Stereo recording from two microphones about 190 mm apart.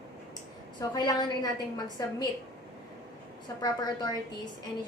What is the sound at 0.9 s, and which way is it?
A woman's voice, 20° left (ahead or behind).